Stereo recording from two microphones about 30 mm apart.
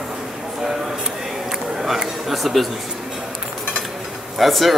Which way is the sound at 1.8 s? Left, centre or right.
Centre.